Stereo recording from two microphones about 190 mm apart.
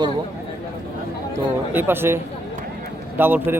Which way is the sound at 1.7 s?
10° right (ahead or behind).